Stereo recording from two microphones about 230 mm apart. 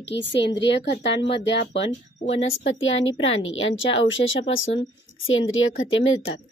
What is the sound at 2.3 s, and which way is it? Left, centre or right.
Speech, left.